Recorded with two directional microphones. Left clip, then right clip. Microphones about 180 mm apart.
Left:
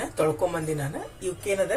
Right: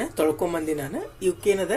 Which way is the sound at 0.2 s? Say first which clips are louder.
Right 1 dB; 40° right (ahead or behind).